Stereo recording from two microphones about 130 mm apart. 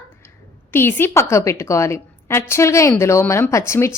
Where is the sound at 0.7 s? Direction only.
15° left (ahead or behind).